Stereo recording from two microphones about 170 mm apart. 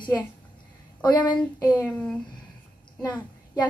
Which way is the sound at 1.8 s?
5° left (ahead or behind).